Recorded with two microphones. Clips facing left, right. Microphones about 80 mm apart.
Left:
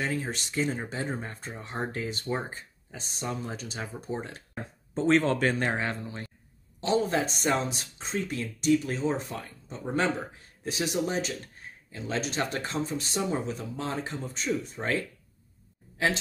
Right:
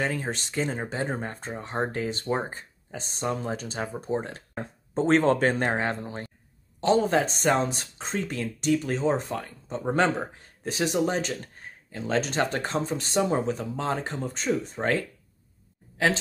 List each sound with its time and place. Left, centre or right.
0.0 s speech: right